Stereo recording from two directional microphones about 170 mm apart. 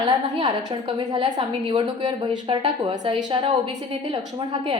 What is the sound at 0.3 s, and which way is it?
A woman's voice, 30° right (ahead or behind).